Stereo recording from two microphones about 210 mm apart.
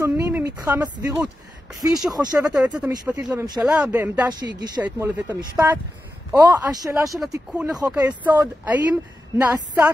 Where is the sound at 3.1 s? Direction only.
5° right (ahead or behind).